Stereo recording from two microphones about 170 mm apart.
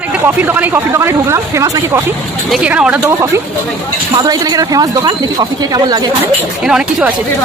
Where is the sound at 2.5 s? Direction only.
5° right (ahead or behind); by 6.1 s 25° right (ahead or behind).